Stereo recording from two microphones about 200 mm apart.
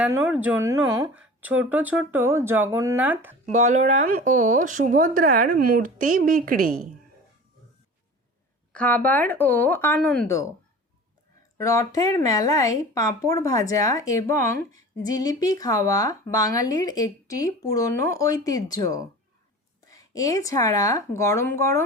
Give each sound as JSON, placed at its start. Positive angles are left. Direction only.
{"t": 0.0, "sound": "speech", "side_deg": -10}
{"t": 3.5, "sound": "speech", "side_deg": -35}
{"t": 8.7, "sound": "speech", "side_deg": 5}
{"t": 11.5, "sound": "speech", "side_deg": 15}